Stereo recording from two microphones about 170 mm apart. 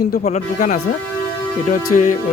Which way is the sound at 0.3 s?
50° left (ahead or behind).